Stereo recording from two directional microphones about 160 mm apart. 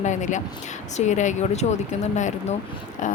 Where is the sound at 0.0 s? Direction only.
50° left (ahead or behind).